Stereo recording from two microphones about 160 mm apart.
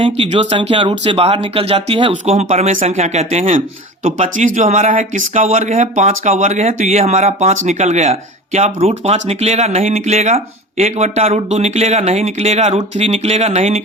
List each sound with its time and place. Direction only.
0.0 s speech: 35° right (ahead or behind)